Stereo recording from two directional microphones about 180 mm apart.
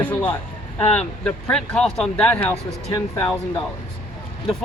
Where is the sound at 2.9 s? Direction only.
20° left (ahead or behind).